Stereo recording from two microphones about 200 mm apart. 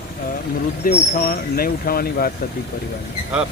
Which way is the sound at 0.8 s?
45° left (ahead or behind).